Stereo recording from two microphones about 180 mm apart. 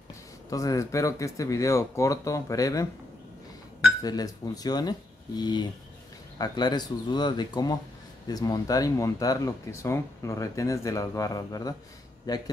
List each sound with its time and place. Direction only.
0.5 s speech: 20° left (ahead or behind)
4.0 s speech: 20° left (ahead or behind)